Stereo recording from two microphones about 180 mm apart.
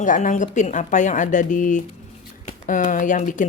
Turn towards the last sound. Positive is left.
turn(degrees=45)  # may be behind; listen again after turning